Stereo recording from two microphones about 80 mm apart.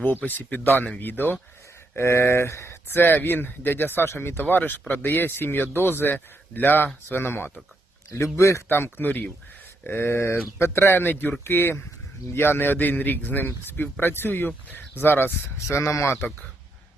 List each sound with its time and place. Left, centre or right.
0.0 s speech: left
2.0 s speech: left
8.1 s speech: left
8.7 s speech: left
15.6 s speech: left